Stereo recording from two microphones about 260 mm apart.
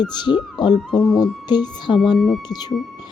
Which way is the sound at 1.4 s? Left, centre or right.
Centre.